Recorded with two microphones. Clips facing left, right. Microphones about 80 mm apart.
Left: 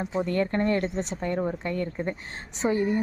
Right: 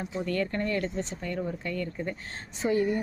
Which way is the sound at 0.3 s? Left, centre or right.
Left.